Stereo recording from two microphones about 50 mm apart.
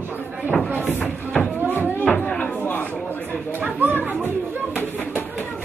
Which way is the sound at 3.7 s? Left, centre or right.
Right.